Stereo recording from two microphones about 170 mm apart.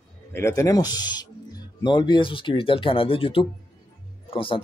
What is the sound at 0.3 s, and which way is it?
Speech, 15° left (ahead or behind).